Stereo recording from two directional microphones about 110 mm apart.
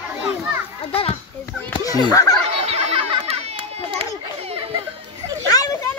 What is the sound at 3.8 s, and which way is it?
Children playing, 60° right (ahead or behind).